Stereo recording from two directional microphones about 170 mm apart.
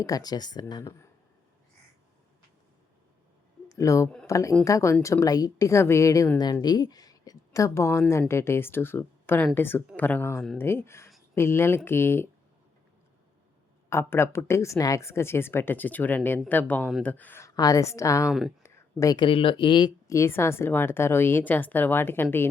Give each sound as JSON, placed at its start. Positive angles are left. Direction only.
{"t": 0.0, "sound": "speech", "side_deg": 20}
{"t": 3.7, "sound": "a woman's voice", "side_deg": 20}
{"t": 13.9, "sound": "a woman's voice", "side_deg": 15}
{"t": 18.3, "sound": "speech", "side_deg": 0}
{"t": 18.6, "sound": "a woman's voice", "side_deg": 20}